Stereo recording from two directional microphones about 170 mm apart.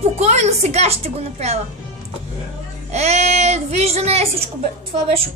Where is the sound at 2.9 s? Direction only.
40° right (ahead or behind).